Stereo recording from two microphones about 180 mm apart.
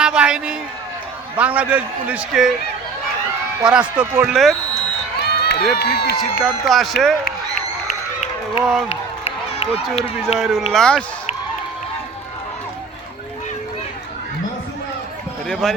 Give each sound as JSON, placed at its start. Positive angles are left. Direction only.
{"t": 0.0, "sound": "a sound", "side_deg": -5}
{"t": 1.4, "sound": "a man's voice", "side_deg": -10}
{"t": 3.7, "sound": "a man's voice", "side_deg": -5}
{"t": 4.3, "sound": "speech", "side_deg": 0}
{"t": 5.2, "sound": "run", "side_deg": 65}
{"t": 5.8, "sound": "speech", "side_deg": 60}
{"t": 6.4, "sound": "speech", "side_deg": 0}
{"t": 8.9, "sound": "speech", "side_deg": 35}
{"t": 10.3, "sound": "speech", "side_deg": 0}
{"t": 15.6, "sound": "speech", "side_deg": 0}